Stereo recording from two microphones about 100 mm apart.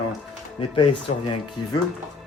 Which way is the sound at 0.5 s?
60° left (ahead or behind).